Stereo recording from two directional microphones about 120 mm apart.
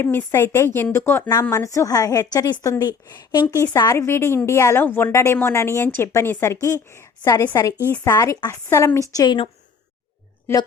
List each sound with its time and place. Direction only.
0.0 s a woman's voice: 20° left (ahead or behind)
8.1 s a woman's voice: 30° left (ahead or behind)
9.2 s a woman's voice: 40° left (ahead or behind)